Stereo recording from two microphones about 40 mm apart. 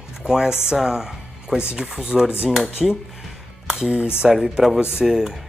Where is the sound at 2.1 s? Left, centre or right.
Centre.